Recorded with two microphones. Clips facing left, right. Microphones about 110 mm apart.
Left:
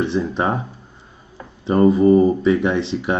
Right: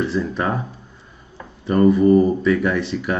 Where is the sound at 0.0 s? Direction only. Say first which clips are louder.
Left 2 dB; 25° left (ahead or behind).